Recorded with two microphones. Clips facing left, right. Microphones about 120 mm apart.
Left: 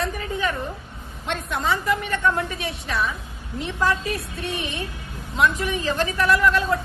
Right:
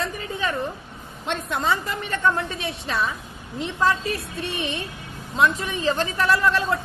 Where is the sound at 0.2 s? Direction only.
30° right (ahead or behind).